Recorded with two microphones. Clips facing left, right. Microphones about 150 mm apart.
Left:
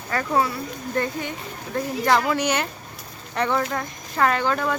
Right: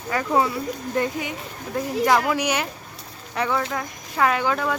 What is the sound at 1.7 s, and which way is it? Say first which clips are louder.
Speech: right 1 dB; 10° right (ahead or behind).